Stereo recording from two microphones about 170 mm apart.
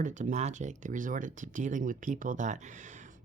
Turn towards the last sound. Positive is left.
turn(degrees=-45)  # may be behind; listen again after turning